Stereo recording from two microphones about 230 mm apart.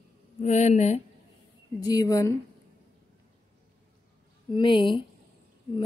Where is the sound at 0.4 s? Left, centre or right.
Left.